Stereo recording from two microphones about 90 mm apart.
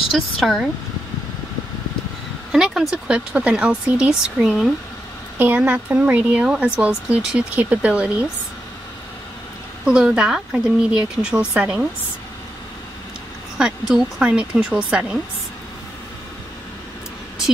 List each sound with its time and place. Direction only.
0.1 s speech: centre (ahead or behind)
2.5 s speech: centre (ahead or behind)
5.6 s speech: 15° right (ahead or behind)
9.8 s speech: 10° right (ahead or behind)
13.6 s speech: 5° right (ahead or behind)